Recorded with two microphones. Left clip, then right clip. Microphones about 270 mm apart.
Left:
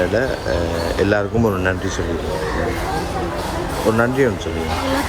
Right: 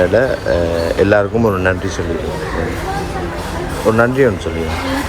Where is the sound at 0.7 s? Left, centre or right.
Left.